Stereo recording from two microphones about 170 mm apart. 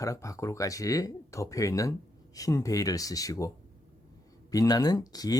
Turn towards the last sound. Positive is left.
turn(degrees=20)  # may be behind; listen again after turning